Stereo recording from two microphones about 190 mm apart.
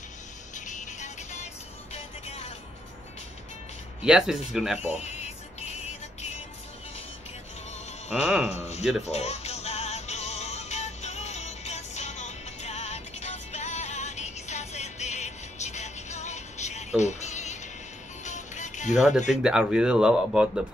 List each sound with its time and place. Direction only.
0.6 s music: 40° left (ahead or behind)
4.0 s speech: 5° right (ahead or behind)
4.7 s music: 35° left (ahead or behind)
8.1 s speech: 5° right (ahead or behind)
8.5 s speech: 35° left (ahead or behind)
9.0 s music: 35° left (ahead or behind)
18.9 s speech: centre (ahead or behind)